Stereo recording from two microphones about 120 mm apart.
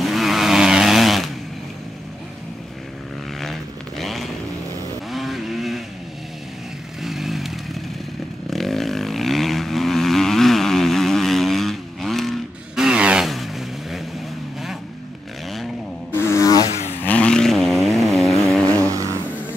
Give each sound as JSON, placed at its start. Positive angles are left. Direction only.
{"t": 0.0, "sound": "vehicle", "side_deg": 0}
{"t": 4.0, "sound": "a sound", "side_deg": 0}
{"t": 5.1, "sound": "vehicle", "side_deg": 0}
{"t": 7.0, "sound": "motorcycle", "side_deg": 0}
{"t": 8.5, "sound": "vehicle", "side_deg": 0}
{"t": 15.4, "sound": "a sound", "side_deg": 0}
{"t": 16.1, "sound": "a sound", "side_deg": 20}
{"t": 17.0, "sound": "vehicle", "side_deg": 10}
{"t": 18.9, "sound": "vehicle", "side_deg": -30}